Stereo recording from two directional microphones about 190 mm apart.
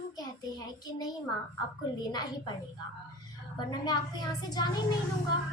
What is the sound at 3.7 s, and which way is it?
Speech, 20° left (ahead or behind).